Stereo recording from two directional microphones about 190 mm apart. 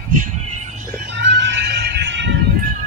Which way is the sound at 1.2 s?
70° right (ahead or behind).